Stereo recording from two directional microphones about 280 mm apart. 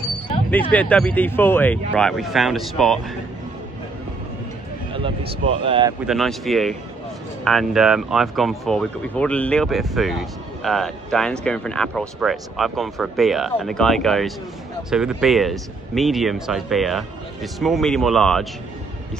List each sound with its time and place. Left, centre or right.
0.5 s speech: centre
4.9 s speech: centre
6.0 s speech: centre